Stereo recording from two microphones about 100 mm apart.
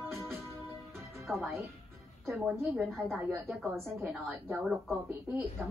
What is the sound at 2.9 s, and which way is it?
Speech, centre (ahead or behind).